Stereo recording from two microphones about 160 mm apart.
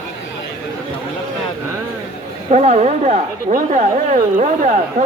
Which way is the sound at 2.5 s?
45° right (ahead or behind).